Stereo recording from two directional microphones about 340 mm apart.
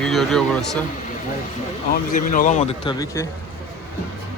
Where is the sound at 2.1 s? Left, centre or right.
Left.